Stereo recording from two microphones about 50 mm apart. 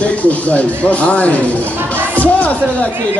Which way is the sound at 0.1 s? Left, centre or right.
Left.